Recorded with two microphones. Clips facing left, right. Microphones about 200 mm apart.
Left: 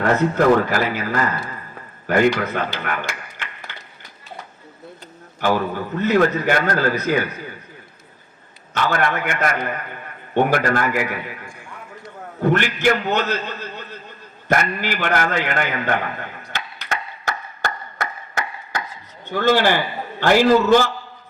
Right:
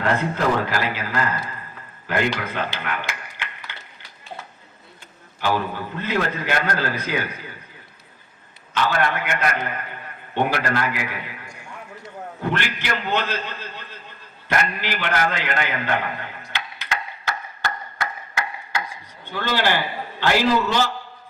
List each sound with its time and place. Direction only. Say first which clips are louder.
0.0 s a man's voice: left 5 dB; 45° left (ahead or behind)
5.4 s a man's voice: left 3 dB; 50° left (ahead or behind)
8.7 s a man's voice: left 1 dB; 50° left (ahead or behind)
12.4 s a man's voice: left 8 dB; 45° left (ahead or behind)
16.8 s chop: left 2 dB; 45° left (ahead or behind)
19.2 s a man's voice: left 6 dB; 45° left (ahead or behind)